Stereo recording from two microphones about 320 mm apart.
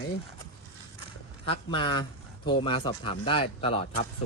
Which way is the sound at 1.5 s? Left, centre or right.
Centre.